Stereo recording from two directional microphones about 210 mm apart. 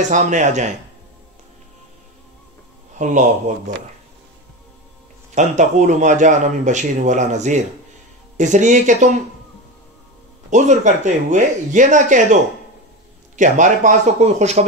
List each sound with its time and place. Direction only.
0.1 s a man's voice: 35° right (ahead or behind)
3.0 s a man's voice: 35° right (ahead or behind)
5.3 s a man's voice: 35° right (ahead or behind)
10.5 s a man's voice: 35° right (ahead or behind)
13.4 s a man's voice: 35° right (ahead or behind)